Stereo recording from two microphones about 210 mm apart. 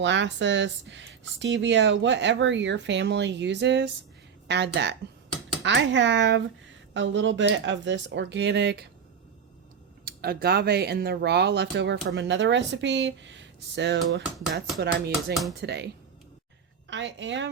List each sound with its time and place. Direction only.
0.0 s speech: 60° right (ahead or behind)
10.1 s speech: 45° right (ahead or behind)
16.9 s speech: 60° right (ahead or behind)